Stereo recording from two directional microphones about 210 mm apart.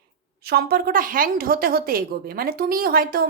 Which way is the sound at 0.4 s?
45° right (ahead or behind).